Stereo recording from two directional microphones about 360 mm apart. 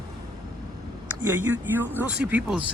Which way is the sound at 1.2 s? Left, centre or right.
Centre.